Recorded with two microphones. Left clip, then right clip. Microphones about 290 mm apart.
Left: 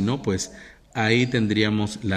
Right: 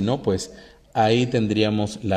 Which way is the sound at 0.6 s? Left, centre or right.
Right.